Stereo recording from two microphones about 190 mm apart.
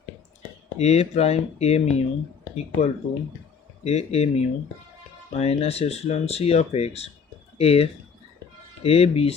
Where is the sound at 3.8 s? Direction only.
35° left (ahead or behind).